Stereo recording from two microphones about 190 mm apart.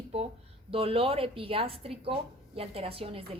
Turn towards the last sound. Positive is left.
turn(degrees=-30)  # may be behind; listen again after turning